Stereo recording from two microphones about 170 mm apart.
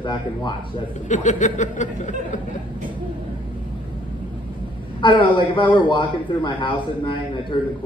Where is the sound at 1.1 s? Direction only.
45° left (ahead or behind).